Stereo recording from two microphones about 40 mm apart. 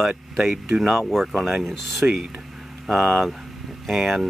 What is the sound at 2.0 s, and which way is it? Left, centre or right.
Speech, right.